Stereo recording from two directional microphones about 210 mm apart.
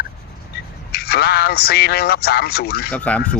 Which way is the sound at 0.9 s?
50° left (ahead or behind).